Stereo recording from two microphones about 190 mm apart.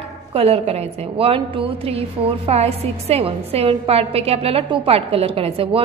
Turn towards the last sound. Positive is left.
turn(degrees=-30)  # may be behind; listen again after turning